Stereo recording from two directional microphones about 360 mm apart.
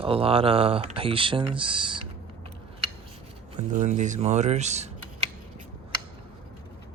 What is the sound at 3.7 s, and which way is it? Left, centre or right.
Speech, right.